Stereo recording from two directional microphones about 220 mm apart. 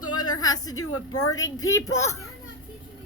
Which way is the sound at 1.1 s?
15° left (ahead or behind).